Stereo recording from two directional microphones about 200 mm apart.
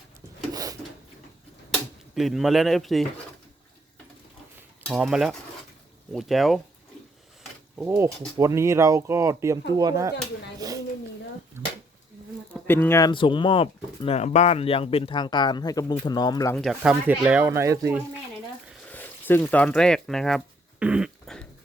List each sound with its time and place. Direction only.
0.5 s a sound: 20° right (ahead or behind)
1.7 s speech: centre (ahead or behind)
4.9 s cutlery: centre (ahead or behind)
7.8 s speech: 10° right (ahead or behind)
11.6 s a sound: 10° right (ahead or behind)
12.5 s speech: 10° left (ahead or behind)
16.6 s cutlery: centre (ahead or behind)
16.9 s speech: 10° right (ahead or behind)
18.9 s a sound: 10° left (ahead or behind)